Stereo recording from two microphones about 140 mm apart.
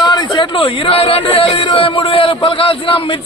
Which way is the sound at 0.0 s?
30° left (ahead or behind).